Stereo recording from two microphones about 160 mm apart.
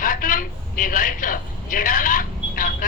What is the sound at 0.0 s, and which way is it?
A woman's voice, 60° left (ahead or behind).